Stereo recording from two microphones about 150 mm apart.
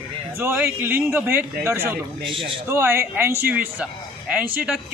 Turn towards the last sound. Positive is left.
turn(degrees=-5)  # may be behind; listen again after turning